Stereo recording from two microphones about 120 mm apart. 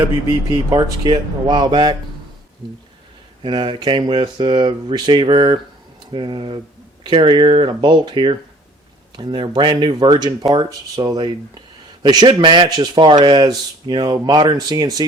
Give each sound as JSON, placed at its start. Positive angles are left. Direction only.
{"t": 0.7, "sound": "speech", "side_deg": -35}
{"t": 3.4, "sound": "speech", "side_deg": -40}